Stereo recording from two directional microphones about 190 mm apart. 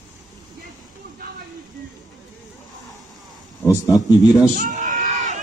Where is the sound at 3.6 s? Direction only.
15° left (ahead or behind).